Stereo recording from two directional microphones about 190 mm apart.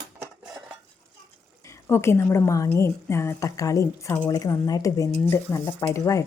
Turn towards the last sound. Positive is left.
turn(degrees=15)  # may be behind; listen again after turning